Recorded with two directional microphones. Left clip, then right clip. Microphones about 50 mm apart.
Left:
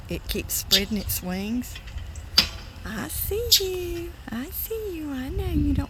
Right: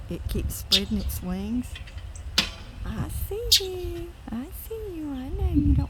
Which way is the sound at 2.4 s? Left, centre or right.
Right.